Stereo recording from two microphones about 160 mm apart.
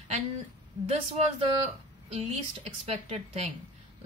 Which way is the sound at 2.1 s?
40° right (ahead or behind).